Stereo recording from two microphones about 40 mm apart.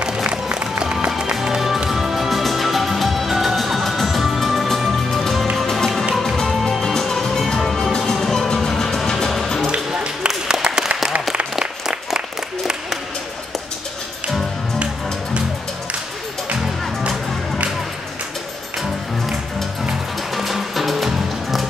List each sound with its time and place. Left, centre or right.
0.3 s music: right; by 9.7 s centre
9.9 s a sound: centre
11.8 s applause: centre
20.3 s music: centre